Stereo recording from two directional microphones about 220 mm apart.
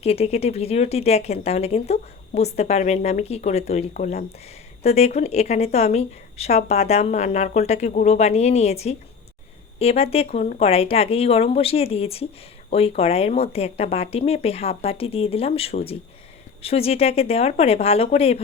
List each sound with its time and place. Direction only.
0.0 s speech: 30° left (ahead or behind)